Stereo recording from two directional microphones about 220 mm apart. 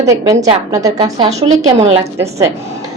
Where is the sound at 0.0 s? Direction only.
15° right (ahead or behind).